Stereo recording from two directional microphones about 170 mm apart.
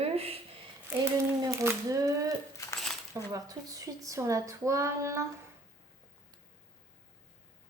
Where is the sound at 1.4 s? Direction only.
15° right (ahead or behind).